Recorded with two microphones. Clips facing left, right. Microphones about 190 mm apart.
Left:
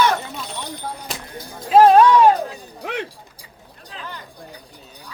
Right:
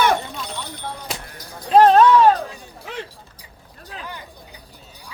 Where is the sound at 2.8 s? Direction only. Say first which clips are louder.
Left 5 dB; 65° left (ahead or behind).